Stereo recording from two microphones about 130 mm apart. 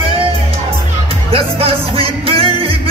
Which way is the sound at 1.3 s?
45° right (ahead or behind).